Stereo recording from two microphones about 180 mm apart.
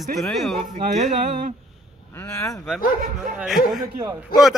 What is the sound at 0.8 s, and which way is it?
Mantra, 40° right (ahead or behind).